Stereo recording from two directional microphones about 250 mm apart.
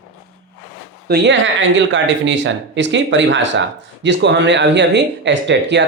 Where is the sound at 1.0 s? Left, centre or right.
Right.